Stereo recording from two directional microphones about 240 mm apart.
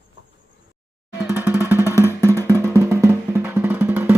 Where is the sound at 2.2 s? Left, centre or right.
Centre.